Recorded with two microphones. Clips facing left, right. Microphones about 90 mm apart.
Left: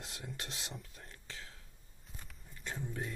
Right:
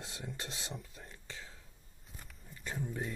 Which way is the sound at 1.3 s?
15° right (ahead or behind).